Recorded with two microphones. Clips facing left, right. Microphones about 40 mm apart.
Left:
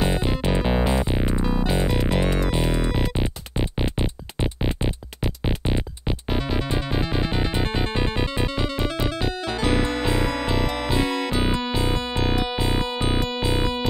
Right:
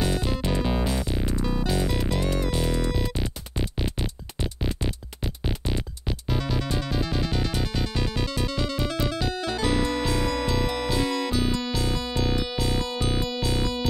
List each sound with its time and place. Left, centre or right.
0.0 s music: left